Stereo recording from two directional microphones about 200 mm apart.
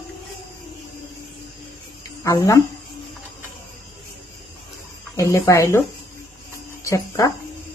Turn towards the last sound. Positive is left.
turn(degrees=15)  # may be behind; listen again after turning